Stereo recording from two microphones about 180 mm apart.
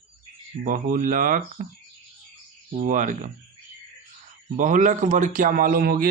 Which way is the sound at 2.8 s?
45° right (ahead or behind).